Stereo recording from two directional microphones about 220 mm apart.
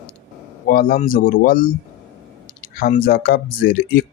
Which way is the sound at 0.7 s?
40° left (ahead or behind).